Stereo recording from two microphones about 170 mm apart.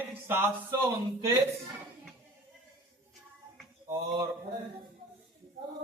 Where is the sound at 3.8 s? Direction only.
20° right (ahead or behind).